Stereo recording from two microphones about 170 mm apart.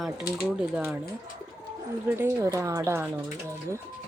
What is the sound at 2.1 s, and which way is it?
A woman's voice, 15° right (ahead or behind).